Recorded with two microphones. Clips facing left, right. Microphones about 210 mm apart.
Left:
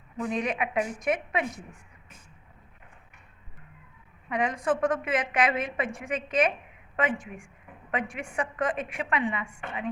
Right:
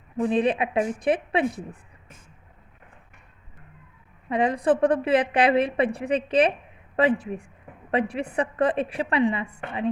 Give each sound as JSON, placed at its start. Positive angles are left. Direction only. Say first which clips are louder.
{"t": 0.2, "sound": "a woman's voice", "louder": "right 7 dB", "side_deg": -30}
{"t": 4.3, "sound": "a woman's voice", "louder": "right 6 dB", "side_deg": -35}